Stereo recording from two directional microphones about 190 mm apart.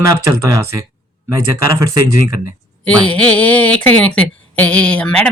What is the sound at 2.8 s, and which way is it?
Speech, 5° left (ahead or behind).